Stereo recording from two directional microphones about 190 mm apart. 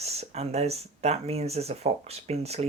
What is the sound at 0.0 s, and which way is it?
Speech, 35° right (ahead or behind).